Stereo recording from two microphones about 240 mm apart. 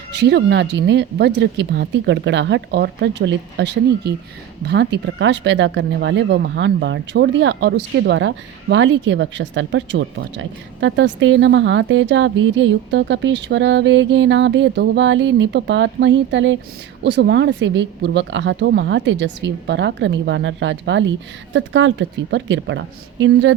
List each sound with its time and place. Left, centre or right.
0.1 s speech: right